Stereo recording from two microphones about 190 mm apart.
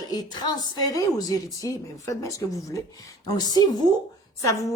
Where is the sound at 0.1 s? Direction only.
20° left (ahead or behind).